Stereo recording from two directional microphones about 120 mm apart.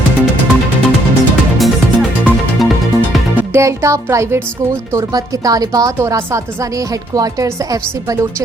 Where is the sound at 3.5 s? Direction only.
25° right (ahead or behind).